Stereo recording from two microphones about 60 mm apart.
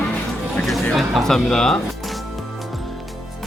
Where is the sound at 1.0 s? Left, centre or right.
Centre.